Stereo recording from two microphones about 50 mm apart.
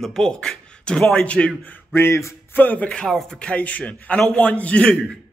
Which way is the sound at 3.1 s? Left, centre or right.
Centre.